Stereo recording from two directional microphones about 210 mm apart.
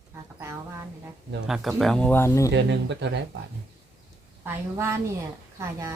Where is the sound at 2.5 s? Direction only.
55° right (ahead or behind).